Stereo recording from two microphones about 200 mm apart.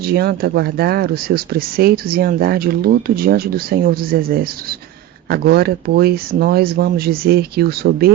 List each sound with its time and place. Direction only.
0.0 s speech: 50° right (ahead or behind)